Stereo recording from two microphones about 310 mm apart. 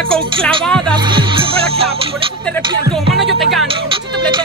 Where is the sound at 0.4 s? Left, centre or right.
Centre.